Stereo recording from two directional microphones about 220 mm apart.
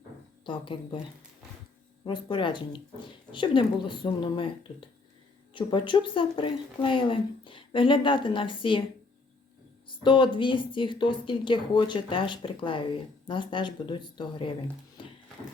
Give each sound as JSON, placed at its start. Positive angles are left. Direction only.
{"t": 0.4, "sound": "speech", "side_deg": 20}
{"t": 2.0, "sound": "speech", "side_deg": 20}
{"t": 10.0, "sound": "speech", "side_deg": 20}
{"t": 15.0, "sound": "a sound", "side_deg": 20}